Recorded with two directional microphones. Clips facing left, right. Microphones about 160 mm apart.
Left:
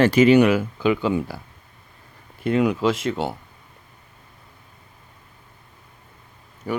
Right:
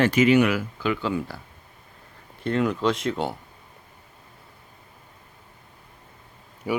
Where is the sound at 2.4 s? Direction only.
10° left (ahead or behind).